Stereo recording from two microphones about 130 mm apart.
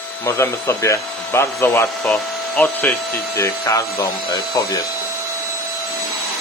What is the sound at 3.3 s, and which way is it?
Speech, 25° left (ahead or behind).